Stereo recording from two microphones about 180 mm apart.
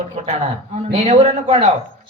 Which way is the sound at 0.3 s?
40° right (ahead or behind).